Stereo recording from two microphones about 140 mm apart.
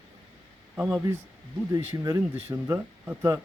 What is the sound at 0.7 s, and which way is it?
Speech, 10° right (ahead or behind).